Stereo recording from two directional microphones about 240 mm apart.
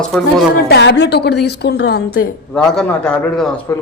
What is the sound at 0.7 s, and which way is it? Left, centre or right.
A woman's voice, left.